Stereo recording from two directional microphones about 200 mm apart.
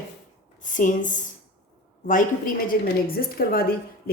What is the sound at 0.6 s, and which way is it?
Speech, 40° left (ahead or behind).